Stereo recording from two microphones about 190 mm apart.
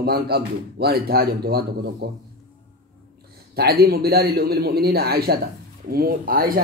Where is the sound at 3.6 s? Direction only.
55° right (ahead or behind).